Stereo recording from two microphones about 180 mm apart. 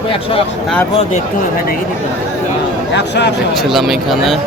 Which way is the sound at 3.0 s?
70° left (ahead or behind).